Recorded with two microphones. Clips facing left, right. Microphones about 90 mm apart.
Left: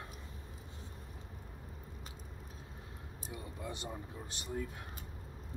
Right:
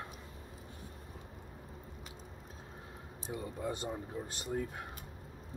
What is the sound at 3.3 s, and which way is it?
Speech, 45° right (ahead or behind).